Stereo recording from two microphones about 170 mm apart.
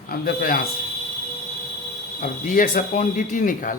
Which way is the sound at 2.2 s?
50° left (ahead or behind).